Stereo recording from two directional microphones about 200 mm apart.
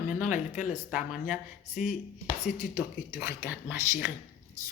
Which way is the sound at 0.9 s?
5° right (ahead or behind).